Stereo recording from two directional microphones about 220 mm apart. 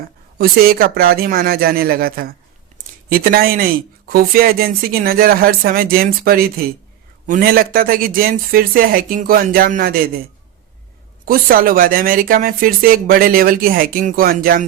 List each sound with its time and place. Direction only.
0.3 s a man's voice: 45° right (ahead or behind)
11.3 s speech: 40° right (ahead or behind)